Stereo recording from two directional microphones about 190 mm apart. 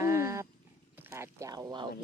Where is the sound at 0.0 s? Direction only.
15° right (ahead or behind).